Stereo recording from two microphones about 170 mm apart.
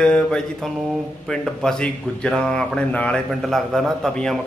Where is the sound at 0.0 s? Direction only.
5° left (ahead or behind).